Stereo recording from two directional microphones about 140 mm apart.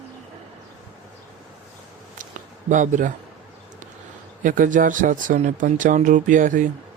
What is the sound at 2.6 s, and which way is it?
Speech, 65° right (ahead or behind).